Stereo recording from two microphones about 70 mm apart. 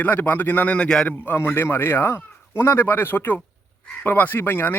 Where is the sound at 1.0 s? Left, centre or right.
Left.